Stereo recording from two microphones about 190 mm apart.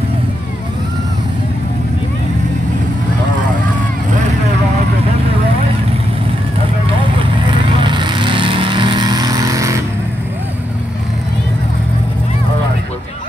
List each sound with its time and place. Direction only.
7.5 s vehicle: 25° right (ahead or behind)